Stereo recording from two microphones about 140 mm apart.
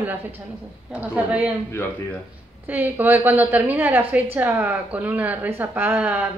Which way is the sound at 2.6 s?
15° right (ahead or behind).